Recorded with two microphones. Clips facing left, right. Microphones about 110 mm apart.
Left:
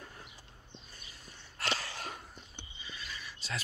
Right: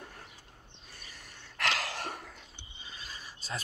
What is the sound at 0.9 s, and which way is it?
Sneeze, 70° right (ahead or behind).